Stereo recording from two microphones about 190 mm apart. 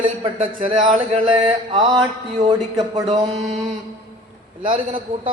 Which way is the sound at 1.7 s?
25° right (ahead or behind).